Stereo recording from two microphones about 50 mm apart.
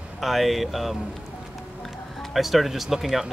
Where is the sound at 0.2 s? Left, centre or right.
Centre.